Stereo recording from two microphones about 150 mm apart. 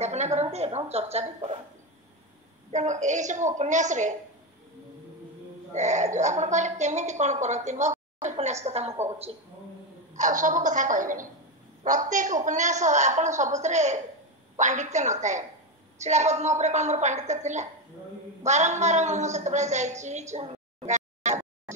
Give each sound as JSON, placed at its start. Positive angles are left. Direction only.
{"t": 0.0, "sound": "a woman's voice", "side_deg": -50}
{"t": 2.7, "sound": "a woman's voice", "side_deg": -50}
{"t": 5.7, "sound": "a woman's voice", "side_deg": -50}
{"t": 8.2, "sound": "a sound", "side_deg": -50}
{"t": 10.1, "sound": "a woman's voice", "side_deg": -60}